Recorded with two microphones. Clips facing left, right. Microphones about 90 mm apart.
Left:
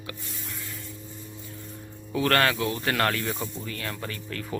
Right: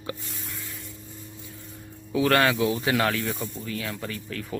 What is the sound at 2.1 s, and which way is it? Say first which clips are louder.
Speech: right 2 dB; 10° right (ahead or behind).